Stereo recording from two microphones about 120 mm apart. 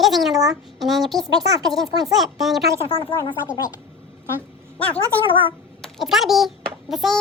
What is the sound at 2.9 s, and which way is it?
Speech, 45° left (ahead or behind).